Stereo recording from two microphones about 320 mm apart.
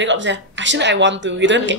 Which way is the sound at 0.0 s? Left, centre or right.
Right.